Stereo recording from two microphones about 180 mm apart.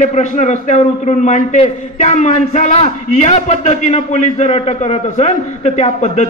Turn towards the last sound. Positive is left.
turn(degrees=40)  # may be behind; listen again after turning